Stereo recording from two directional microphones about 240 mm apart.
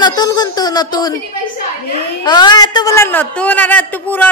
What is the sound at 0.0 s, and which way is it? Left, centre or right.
Speech, centre.